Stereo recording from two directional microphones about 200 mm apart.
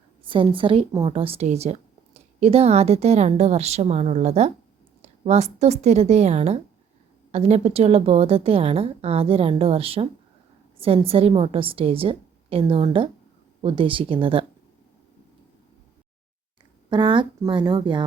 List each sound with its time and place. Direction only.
0.3 s a woman's voice: 25° right (ahead or behind)
16.9 s a woman's voice: 25° right (ahead or behind)